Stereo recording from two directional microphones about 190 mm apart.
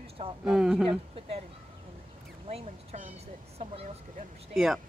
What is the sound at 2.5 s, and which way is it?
Speech, 30° right (ahead or behind).